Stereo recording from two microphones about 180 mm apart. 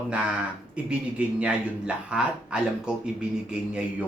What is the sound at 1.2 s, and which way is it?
Speech, 5° right (ahead or behind).